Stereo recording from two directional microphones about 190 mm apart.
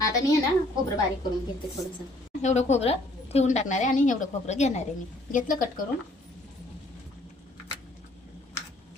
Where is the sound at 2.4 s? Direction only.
35° left (ahead or behind).